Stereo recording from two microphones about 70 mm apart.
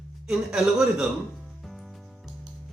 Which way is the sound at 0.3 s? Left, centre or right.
Centre.